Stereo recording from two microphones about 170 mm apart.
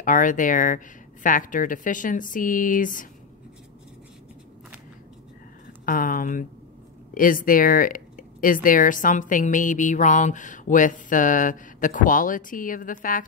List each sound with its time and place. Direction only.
0.0 s speech: 50° left (ahead or behind)
5.9 s a woman's voice: 55° left (ahead or behind)